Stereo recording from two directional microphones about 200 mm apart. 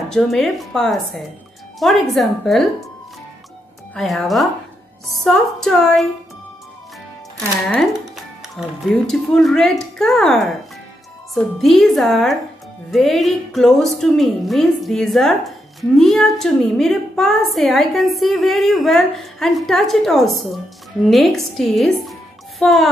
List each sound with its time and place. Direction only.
0.1 s a woman's voice: centre (ahead or behind)
3.9 s a woman's voice: centre (ahead or behind)
7.6 s a woman's voice: 5° left (ahead or behind)